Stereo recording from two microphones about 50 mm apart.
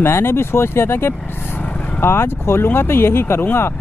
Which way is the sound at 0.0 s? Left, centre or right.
Left.